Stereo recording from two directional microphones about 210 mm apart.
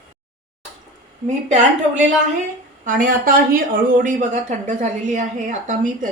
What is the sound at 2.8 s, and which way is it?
Speech, 40° right (ahead or behind).